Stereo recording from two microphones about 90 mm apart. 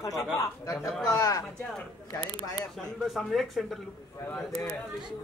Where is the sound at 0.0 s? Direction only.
40° left (ahead or behind).